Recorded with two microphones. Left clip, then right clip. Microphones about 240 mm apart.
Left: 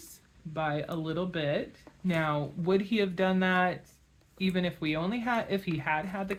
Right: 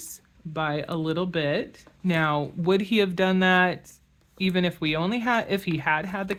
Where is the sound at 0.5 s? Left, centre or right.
Right.